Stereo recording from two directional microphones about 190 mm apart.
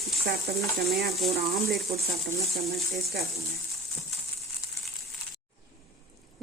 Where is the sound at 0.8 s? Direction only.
Centre (ahead or behind).